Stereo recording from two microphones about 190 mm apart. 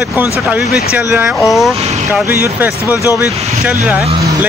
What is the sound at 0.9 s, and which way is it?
Speech, 10° right (ahead or behind).